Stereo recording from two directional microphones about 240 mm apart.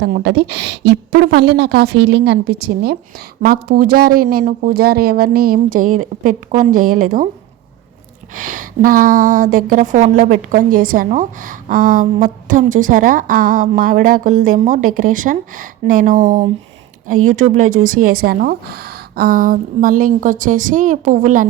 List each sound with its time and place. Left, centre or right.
0.0 s a woman's voice: right
8.4 s a woman's voice: right